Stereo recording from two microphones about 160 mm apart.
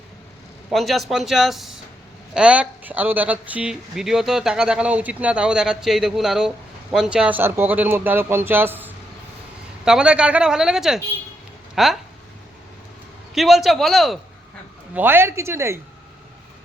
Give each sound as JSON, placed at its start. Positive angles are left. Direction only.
{"t": 0.7, "sound": "speech", "side_deg": 0}
{"t": 13.3, "sound": "speech", "side_deg": 0}
{"t": 14.9, "sound": "speech", "side_deg": -15}